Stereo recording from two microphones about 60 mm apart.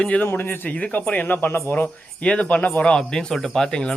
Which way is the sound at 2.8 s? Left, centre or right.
Centre.